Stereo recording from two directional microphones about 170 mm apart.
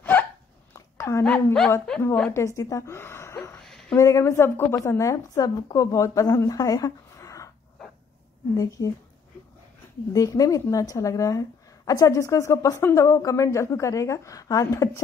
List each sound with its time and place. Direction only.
0.0 s hiccup: 10° left (ahead or behind)
0.7 s a sound: 20° left (ahead or behind)
1.2 s a woman's voice: 5° left (ahead or behind)
3.5 s a sound: 5° left (ahead or behind)
3.9 s a woman's voice: 20° left (ahead or behind)
8.5 s a woman's voice: 20° left (ahead or behind)
10.1 s a woman's voice: 20° left (ahead or behind)